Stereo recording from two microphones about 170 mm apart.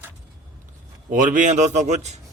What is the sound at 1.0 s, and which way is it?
A man's voice, 50° right (ahead or behind).